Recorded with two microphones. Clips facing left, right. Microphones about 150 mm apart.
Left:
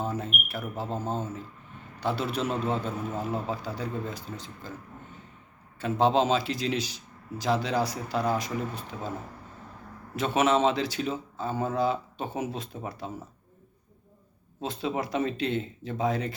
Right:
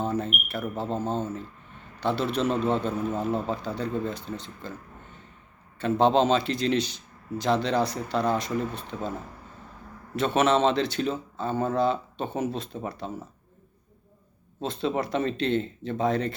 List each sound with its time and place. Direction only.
0.0 s a sound: 10° left (ahead or behind)
0.8 s speech: 25° right (ahead or behind)
1.0 s speech: 10° left (ahead or behind)
5.8 s speech: 5° left (ahead or behind)
10.2 s speech: 10° left (ahead or behind)
14.6 s speech: 10° left (ahead or behind)